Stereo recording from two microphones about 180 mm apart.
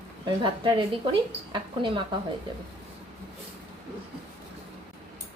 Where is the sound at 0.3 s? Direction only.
30° right (ahead or behind).